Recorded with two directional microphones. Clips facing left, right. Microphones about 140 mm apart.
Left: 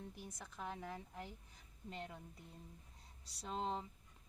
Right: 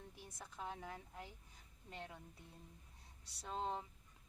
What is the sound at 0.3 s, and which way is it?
Speech, 10° right (ahead or behind).